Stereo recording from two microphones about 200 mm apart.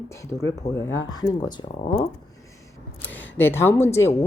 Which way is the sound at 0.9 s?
20° left (ahead or behind).